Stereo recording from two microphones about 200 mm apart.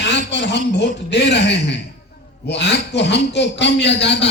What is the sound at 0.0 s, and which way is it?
A man's voice, 60° left (ahead or behind).